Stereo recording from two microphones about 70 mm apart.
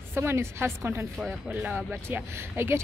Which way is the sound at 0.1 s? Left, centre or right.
Right.